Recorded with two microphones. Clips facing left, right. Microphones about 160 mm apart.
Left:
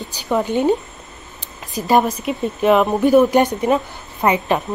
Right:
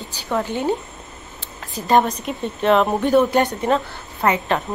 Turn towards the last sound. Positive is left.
turn(degrees=15)  # may be behind; listen again after turning